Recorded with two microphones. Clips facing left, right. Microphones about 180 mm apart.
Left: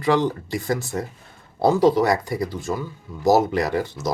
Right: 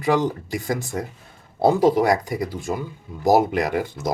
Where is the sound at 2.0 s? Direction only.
15° right (ahead or behind).